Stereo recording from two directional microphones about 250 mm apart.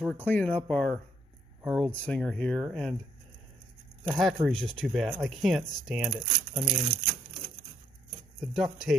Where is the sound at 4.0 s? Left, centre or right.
Centre.